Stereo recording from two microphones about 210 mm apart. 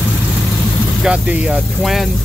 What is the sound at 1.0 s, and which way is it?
Speech, 5° right (ahead or behind).